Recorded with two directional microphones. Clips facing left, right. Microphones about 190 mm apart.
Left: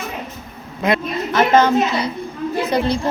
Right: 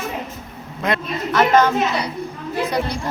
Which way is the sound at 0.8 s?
5° left (ahead or behind).